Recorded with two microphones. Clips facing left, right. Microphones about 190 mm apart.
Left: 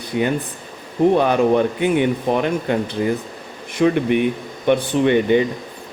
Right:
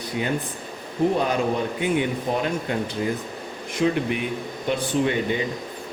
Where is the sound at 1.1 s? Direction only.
65° left (ahead or behind).